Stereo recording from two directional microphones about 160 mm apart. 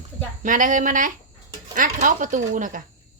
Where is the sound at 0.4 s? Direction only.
55° right (ahead or behind).